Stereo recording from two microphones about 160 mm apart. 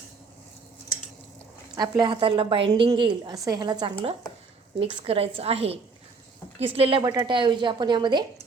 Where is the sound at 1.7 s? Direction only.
25° right (ahead or behind).